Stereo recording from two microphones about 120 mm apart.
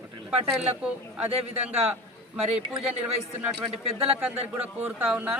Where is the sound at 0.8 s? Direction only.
10° right (ahead or behind).